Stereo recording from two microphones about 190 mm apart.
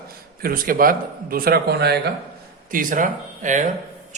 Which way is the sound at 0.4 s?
50° right (ahead or behind).